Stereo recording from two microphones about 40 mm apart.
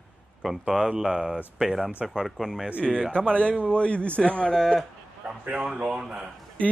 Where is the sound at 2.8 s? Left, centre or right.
Left.